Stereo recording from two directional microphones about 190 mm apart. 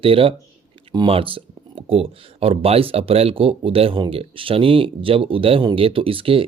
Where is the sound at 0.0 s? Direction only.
30° right (ahead or behind).